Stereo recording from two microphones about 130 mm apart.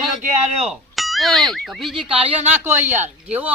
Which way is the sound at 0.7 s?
Centre (ahead or behind).